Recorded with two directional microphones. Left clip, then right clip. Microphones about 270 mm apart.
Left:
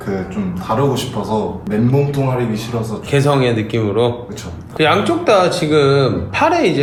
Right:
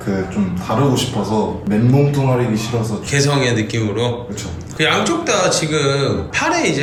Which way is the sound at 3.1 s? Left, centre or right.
Centre.